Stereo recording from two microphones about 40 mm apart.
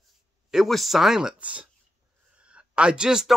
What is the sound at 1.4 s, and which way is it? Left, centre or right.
Speech, right.